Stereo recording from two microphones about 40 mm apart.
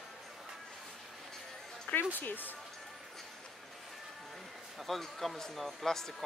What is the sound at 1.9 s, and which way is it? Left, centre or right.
Speech, left.